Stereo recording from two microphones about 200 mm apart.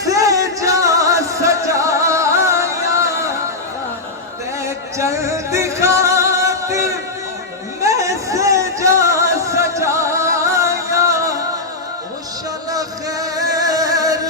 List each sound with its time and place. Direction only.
0.0 s music: 15° right (ahead or behind)
4.6 s music: 15° right (ahead or behind)
12.7 s music: 20° right (ahead or behind)